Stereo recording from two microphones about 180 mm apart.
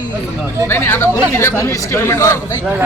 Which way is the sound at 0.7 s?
15° left (ahead or behind).